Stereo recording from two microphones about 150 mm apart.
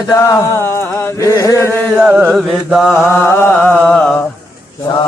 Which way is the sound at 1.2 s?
20° left (ahead or behind).